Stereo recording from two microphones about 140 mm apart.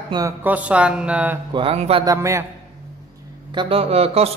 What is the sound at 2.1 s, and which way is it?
Speech, 20° right (ahead or behind).